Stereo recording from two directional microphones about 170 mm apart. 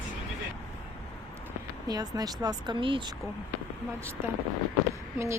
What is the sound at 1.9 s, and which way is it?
Speech, 20° right (ahead or behind).